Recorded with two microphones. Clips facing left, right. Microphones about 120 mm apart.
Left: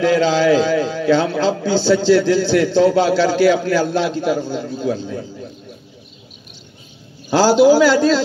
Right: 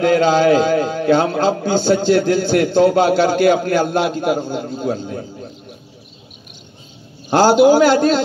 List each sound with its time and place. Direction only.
0.0 s a man's voice: 50° right (ahead or behind)
7.2 s a man's voice: 50° right (ahead or behind)